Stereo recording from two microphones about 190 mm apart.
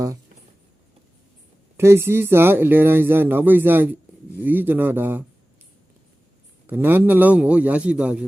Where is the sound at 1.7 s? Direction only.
15° right (ahead or behind).